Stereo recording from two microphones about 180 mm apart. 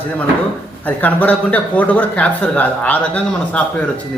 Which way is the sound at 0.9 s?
10° left (ahead or behind).